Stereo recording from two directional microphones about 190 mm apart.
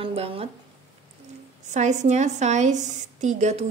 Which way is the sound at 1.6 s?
40° right (ahead or behind).